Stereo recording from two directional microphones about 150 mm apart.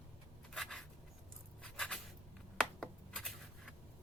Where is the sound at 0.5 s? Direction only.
Centre (ahead or behind).